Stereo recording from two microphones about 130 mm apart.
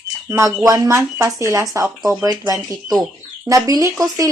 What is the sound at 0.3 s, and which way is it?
Speech, 20° right (ahead or behind).